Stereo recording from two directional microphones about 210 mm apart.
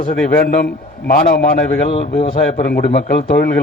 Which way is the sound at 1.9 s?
30° left (ahead or behind).